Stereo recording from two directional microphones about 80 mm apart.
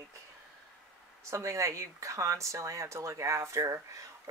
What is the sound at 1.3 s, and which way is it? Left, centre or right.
Speech, right.